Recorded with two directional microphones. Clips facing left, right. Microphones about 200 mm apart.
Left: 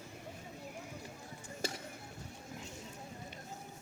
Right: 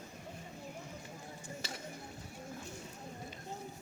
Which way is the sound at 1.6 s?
50° left (ahead or behind).